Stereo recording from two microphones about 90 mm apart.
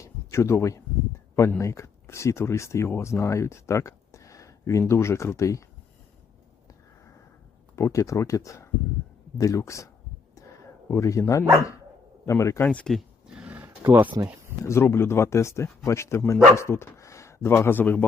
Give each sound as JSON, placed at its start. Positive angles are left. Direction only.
{"t": 0.0, "sound": "a sound", "side_deg": 30}
{"t": 1.4, "sound": "speech", "side_deg": 30}
{"t": 7.8, "sound": "speech", "side_deg": 35}
{"t": 12.6, "sound": "speech", "side_deg": 15}
{"t": 12.9, "sound": "roaring cats", "side_deg": -10}
{"t": 13.7, "sound": "a sound", "side_deg": -25}
{"t": 14.6, "sound": "speech", "side_deg": 30}